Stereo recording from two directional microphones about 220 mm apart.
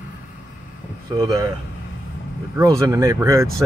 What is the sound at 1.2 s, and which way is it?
Speech, 15° right (ahead or behind).